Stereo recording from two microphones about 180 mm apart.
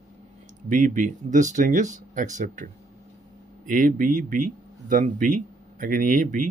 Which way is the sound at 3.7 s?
50° right (ahead or behind).